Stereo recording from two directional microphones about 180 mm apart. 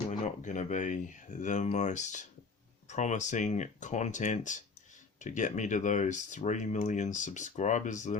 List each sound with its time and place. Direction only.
0.1 s speech: 45° left (ahead or behind)